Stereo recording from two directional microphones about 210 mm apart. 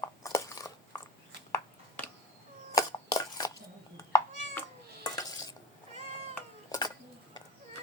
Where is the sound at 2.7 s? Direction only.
15° left (ahead or behind).